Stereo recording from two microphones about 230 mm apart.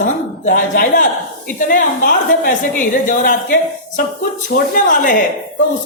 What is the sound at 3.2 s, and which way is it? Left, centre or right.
A woman's voice, left.